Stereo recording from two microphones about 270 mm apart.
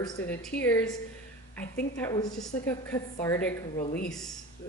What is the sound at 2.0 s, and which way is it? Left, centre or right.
Speech, centre.